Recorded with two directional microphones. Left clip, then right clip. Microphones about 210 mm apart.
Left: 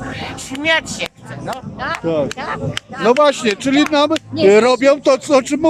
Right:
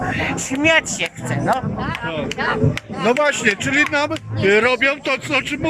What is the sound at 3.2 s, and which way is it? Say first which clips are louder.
Speech: left 3 dB; 15° left (ahead or behind).